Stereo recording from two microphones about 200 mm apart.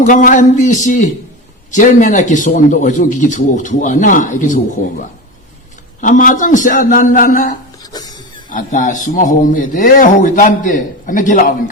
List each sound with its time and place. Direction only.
0.0 s a man's voice: 40° left (ahead or behind)
6.0 s a man's voice: 40° left (ahead or behind)
7.8 s a sound: 20° left (ahead or behind)
8.4 s a man's voice: 40° left (ahead or behind)